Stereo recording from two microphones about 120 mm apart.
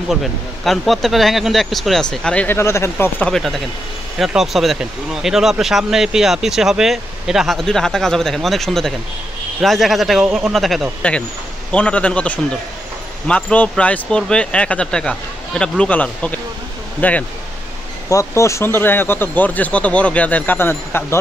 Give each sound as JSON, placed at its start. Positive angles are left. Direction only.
{"t": 0.1, "sound": "speech", "side_deg": 0}
{"t": 3.3, "sound": "speech", "side_deg": 5}
{"t": 18.1, "sound": "speech", "side_deg": 25}